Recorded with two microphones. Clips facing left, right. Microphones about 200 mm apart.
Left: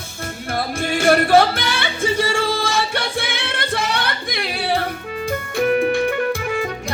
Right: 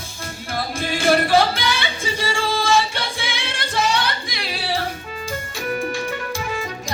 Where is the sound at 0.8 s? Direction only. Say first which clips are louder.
Left 2 dB; 55° left (ahead or behind).